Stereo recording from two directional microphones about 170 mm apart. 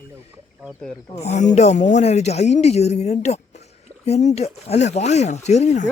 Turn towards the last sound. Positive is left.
turn(degrees=40)  # may be behind; listen again after turning